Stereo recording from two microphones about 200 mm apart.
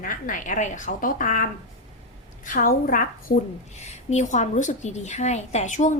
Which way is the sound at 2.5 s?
45° left (ahead or behind).